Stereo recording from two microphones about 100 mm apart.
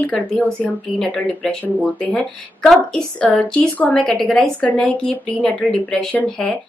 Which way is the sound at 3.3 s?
15° left (ahead or behind).